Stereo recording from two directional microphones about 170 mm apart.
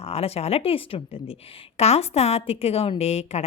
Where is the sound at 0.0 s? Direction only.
35° left (ahead or behind).